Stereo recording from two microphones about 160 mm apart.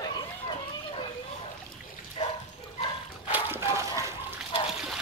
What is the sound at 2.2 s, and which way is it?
Dog, 35° left (ahead or behind).